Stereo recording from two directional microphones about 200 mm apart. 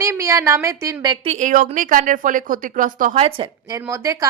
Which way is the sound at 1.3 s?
40° right (ahead or behind).